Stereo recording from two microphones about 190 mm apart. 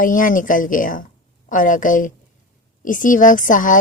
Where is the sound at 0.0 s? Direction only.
45° left (ahead or behind).